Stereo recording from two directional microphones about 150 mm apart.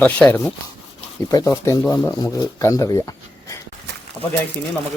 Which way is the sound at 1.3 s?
20° left (ahead or behind).